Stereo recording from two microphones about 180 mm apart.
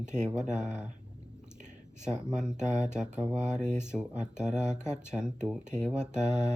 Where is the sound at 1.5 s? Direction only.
40° right (ahead or behind).